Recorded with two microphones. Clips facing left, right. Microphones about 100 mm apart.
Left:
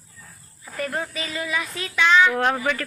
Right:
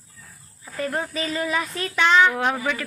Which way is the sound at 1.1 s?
35° right (ahead or behind).